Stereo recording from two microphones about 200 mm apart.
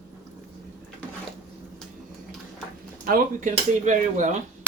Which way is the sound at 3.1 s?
40° right (ahead or behind).